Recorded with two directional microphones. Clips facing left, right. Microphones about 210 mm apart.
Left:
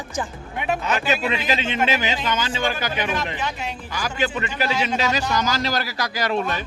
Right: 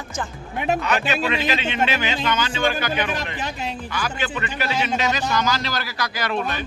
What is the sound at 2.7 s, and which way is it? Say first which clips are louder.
A man's voice: right 1 dB; 35° right (ahead or behind).